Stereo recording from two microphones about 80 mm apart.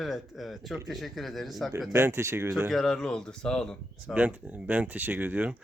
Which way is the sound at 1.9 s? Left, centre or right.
Right.